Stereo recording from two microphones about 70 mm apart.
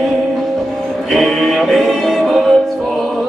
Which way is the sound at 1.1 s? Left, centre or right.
Centre.